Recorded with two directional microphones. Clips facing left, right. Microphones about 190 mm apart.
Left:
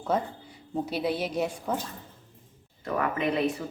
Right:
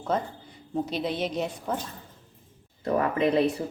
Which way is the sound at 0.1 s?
10° left (ahead or behind).